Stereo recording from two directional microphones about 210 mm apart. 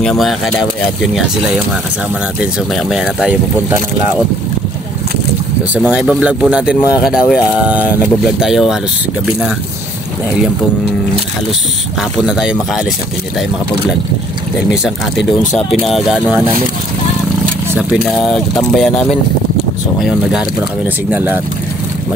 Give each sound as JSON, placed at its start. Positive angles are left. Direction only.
{"t": 0.0, "sound": "speech", "side_deg": 0}
{"t": 2.4, "sound": "speech", "side_deg": 0}
{"t": 5.8, "sound": "speech", "side_deg": -5}
{"t": 12.2, "sound": "speech", "side_deg": -5}
{"t": 15.5, "sound": "speech", "side_deg": 0}
{"t": 17.7, "sound": "speech", "side_deg": 0}